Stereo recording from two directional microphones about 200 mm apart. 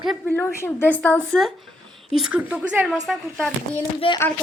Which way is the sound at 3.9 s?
25° left (ahead or behind).